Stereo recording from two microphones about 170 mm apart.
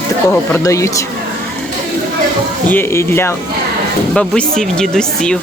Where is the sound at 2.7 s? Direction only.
15° left (ahead or behind).